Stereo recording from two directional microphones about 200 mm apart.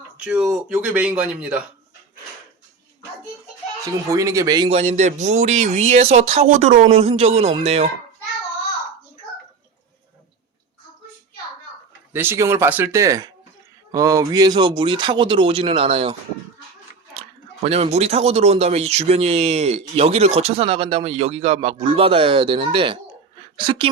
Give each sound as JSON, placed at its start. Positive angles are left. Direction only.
{"t": 0.3, "sound": "speech", "side_deg": -5}
{"t": 4.1, "sound": "speech", "side_deg": -15}
{"t": 4.7, "sound": "speech", "side_deg": -35}
{"t": 12.1, "sound": "speech", "side_deg": -10}
{"t": 17.2, "sound": "speech", "side_deg": -30}